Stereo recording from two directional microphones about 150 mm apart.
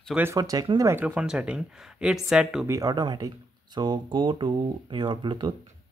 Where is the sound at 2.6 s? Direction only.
25° right (ahead or behind).